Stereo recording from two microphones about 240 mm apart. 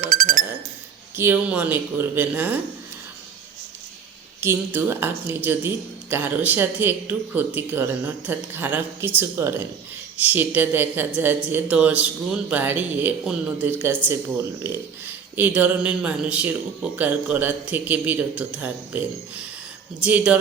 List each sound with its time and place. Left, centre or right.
0.0 s a sound: right
1.1 s speech: centre
4.4 s speech: centre